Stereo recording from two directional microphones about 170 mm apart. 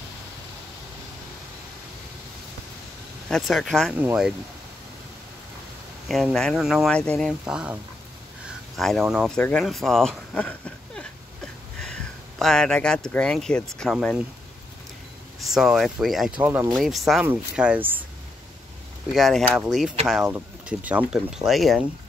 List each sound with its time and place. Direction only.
3.3 s speech: centre (ahead or behind)
3.9 s speech: 10° right (ahead or behind)
6.0 s speech: centre (ahead or behind)
9.4 s speech: 5° left (ahead or behind)
15.5 s speech: 5° right (ahead or behind)
19.1 s speech: centre (ahead or behind)